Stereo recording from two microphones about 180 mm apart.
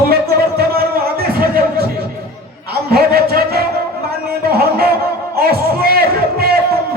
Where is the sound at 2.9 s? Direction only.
60° right (ahead or behind).